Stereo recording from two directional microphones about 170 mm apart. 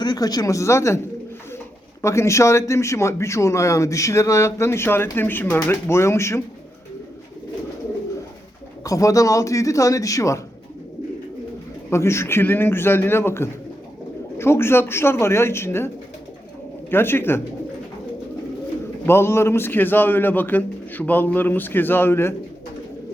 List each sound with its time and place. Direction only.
0.0 s speech: 25° left (ahead or behind)
2.0 s speech: 15° left (ahead or behind)
8.8 s a man's voice: 20° left (ahead or behind)
11.9 s speech: 15° left (ahead or behind)
16.9 s speech: 15° left (ahead or behind)
19.0 s speech: 15° left (ahead or behind)